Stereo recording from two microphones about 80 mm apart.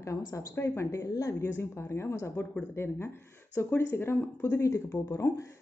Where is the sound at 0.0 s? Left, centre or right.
Left.